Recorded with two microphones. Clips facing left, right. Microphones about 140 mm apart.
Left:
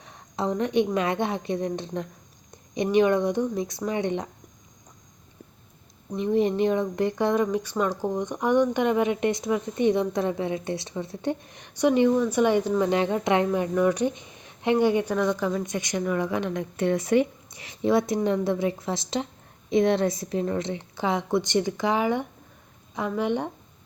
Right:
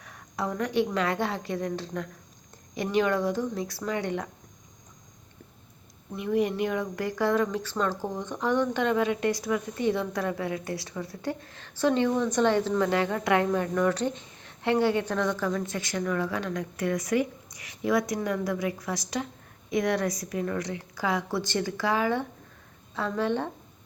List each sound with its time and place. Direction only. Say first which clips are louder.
0.0 s speech: left 4 dB; 25° left (ahead or behind)
6.1 s speech: left 4 dB; 30° left (ahead or behind)